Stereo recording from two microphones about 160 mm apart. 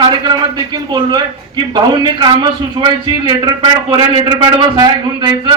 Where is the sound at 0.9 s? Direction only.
30° right (ahead or behind).